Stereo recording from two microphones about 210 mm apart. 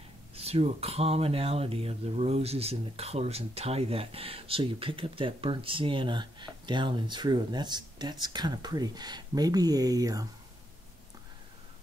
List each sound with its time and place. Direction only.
0.4 s speech: 30° right (ahead or behind)